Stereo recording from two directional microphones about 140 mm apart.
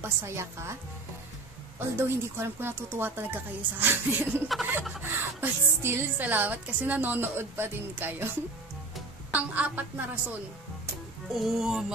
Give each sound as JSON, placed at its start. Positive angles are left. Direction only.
{"t": 0.2, "sound": "a woman's voice", "side_deg": -20}
{"t": 2.0, "sound": "speech", "side_deg": -15}
{"t": 4.3, "sound": "speech", "side_deg": -5}
{"t": 5.1, "sound": "speech", "side_deg": -15}
{"t": 9.3, "sound": "speech", "side_deg": -10}
{"t": 11.3, "sound": "speech", "side_deg": 0}